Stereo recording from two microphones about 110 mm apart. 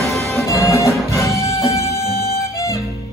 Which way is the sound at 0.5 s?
25° left (ahead or behind).